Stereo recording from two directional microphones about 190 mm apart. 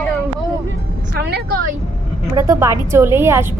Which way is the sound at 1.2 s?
60° right (ahead or behind).